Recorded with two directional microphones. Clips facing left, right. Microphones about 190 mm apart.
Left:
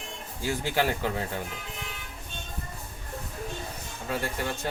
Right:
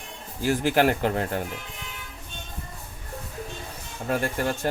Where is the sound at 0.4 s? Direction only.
55° right (ahead or behind).